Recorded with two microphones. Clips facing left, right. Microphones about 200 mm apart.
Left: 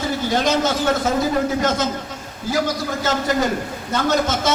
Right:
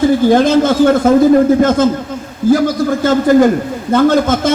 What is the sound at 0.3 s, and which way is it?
Speech, 55° right (ahead or behind).